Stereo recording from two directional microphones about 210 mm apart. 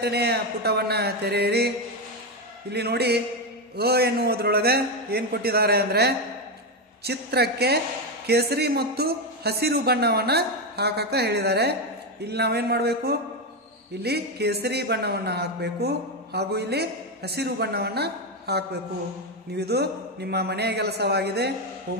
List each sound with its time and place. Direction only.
0.0 s speech: 50° right (ahead or behind)
2.7 s speech: 50° right (ahead or behind)